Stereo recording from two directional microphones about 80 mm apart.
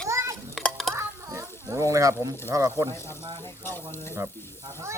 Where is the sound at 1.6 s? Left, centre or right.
Right.